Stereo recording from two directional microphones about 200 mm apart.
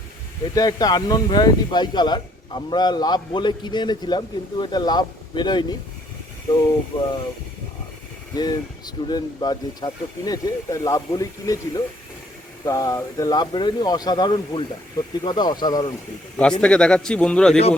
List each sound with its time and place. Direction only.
0.5 s speech: 20° left (ahead or behind)
6.9 s speech: 30° left (ahead or behind)
8.3 s speech: 20° left (ahead or behind)
16.4 s a man's voice: 5° left (ahead or behind)